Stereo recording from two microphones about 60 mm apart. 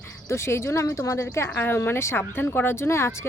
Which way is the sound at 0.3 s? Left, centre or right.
Left.